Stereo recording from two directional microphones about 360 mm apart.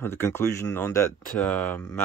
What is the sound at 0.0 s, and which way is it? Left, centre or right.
Speech, centre.